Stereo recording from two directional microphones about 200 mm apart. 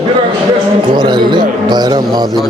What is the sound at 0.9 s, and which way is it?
A man's voice, 20° right (ahead or behind).